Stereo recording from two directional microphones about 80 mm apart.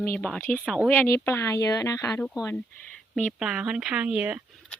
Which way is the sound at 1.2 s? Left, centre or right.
Left.